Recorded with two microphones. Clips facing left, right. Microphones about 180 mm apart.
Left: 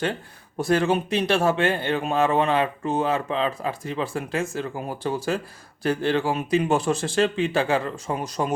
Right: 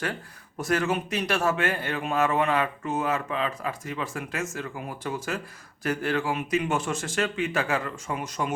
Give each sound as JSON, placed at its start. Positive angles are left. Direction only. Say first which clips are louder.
{"t": 0.0, "sound": "speech", "louder": "left 5 dB", "side_deg": 30}